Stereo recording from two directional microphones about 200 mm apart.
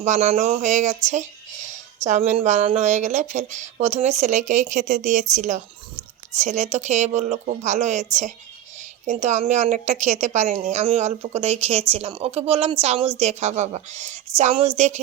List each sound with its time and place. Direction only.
0.0 s speech: 35° right (ahead or behind)